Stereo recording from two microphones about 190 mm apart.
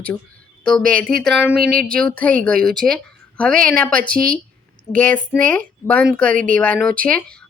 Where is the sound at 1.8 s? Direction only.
5° left (ahead or behind).